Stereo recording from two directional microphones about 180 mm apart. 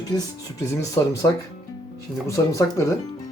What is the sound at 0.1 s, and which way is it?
Speech, 20° left (ahead or behind).